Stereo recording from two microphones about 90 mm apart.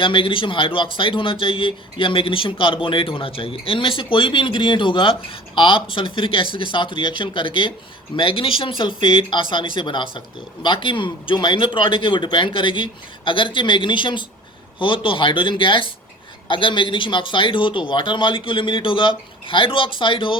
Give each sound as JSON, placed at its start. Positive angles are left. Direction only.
{"t": 0.0, "sound": "speech", "side_deg": 75}
{"t": 8.1, "sound": "speech", "side_deg": 85}
{"t": 8.8, "sound": "speech", "side_deg": 65}